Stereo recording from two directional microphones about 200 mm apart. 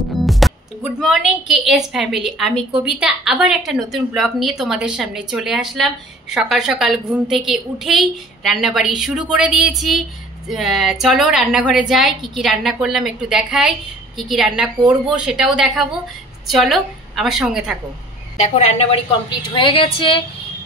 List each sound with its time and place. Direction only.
0.1 s music: centre (ahead or behind)
1.0 s a woman's voice: centre (ahead or behind)
18.4 s a woman's voice: 35° left (ahead or behind)